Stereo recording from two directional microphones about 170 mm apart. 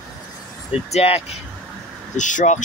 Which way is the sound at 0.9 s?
35° left (ahead or behind).